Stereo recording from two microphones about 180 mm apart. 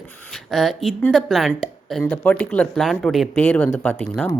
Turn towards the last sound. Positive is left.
turn(degrees=10)  # may be behind; listen again after turning